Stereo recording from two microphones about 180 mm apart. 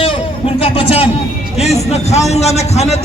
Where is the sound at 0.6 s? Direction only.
30° left (ahead or behind).